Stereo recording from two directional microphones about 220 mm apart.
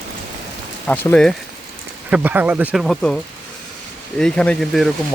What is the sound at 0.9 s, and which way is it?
Speech, 5° left (ahead or behind).